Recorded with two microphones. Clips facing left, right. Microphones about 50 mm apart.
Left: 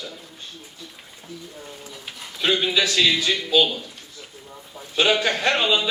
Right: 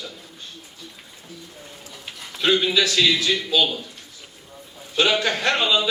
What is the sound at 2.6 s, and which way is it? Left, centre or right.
A man's voice, centre.